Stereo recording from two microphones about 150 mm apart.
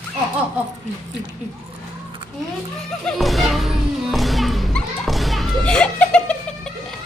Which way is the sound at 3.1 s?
Centre (ahead or behind).